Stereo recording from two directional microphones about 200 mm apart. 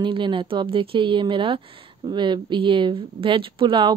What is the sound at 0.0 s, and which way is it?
Speech, 25° right (ahead or behind).